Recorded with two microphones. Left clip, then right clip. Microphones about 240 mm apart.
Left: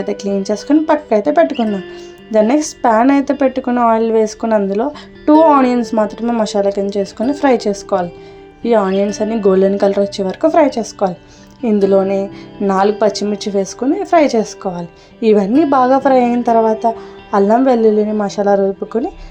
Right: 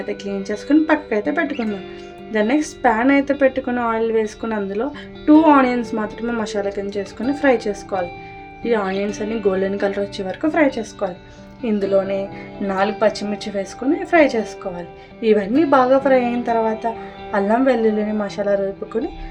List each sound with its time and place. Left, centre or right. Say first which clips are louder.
0.0 s a woman's voice: left 7 dB; left